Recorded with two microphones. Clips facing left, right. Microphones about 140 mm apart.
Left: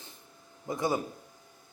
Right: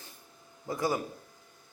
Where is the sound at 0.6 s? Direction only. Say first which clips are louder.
Left 1 dB; 20° left (ahead or behind).